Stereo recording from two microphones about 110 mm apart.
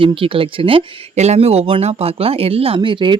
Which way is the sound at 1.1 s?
85° right.